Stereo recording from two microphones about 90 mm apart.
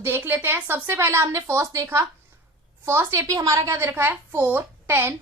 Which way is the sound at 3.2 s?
40° right (ahead or behind).